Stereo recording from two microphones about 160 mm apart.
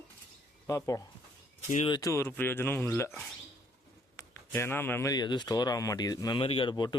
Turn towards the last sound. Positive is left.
turn(degrees=30)  # may be behind; listen again after turning